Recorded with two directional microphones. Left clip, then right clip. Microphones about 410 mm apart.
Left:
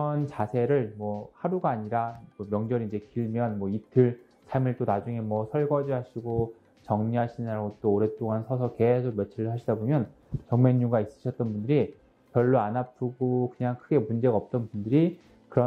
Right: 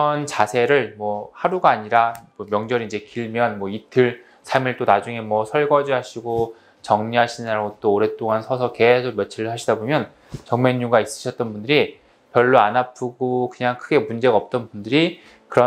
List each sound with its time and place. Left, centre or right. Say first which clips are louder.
0.0 s speech: right 12 dB; centre
6.2 s speech: right 8 dB; centre
6.9 s speech: right 11 dB; centre
13.0 s speech: right 7 dB; centre
13.5 s speech: right 9 dB; centre